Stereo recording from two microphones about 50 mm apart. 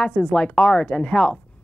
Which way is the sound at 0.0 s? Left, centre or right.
Left.